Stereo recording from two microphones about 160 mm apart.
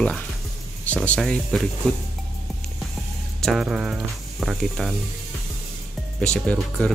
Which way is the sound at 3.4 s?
Centre (ahead or behind).